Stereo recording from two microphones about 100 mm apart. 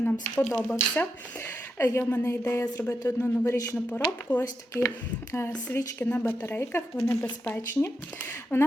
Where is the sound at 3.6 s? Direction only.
20° left (ahead or behind).